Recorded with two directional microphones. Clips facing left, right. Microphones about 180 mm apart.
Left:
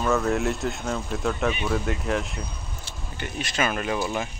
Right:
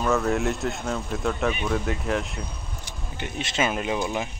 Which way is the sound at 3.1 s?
20° right (ahead or behind).